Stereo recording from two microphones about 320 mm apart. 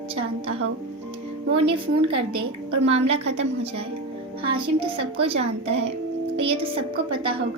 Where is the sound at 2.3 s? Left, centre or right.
Right.